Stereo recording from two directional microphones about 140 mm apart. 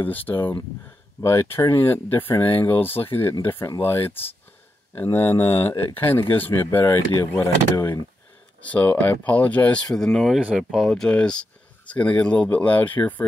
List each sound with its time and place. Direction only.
0.0 s speech: 15° left (ahead or behind)
8.6 s speech: 10° left (ahead or behind)